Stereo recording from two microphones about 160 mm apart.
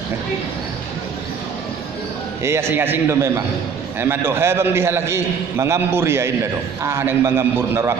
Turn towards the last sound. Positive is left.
turn(degrees=-15)  # may be behind; listen again after turning